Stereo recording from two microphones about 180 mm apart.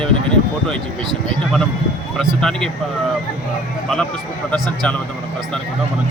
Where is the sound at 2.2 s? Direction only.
5° left (ahead or behind).